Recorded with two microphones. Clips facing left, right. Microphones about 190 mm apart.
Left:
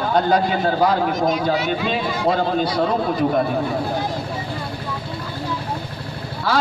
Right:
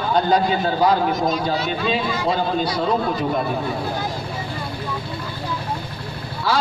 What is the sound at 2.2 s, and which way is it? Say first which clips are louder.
A man's voice: left 4 dB; 55° left (ahead or behind).